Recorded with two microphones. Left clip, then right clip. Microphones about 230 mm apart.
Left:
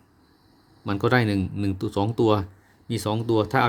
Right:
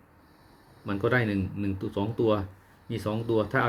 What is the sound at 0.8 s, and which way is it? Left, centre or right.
Speech, left.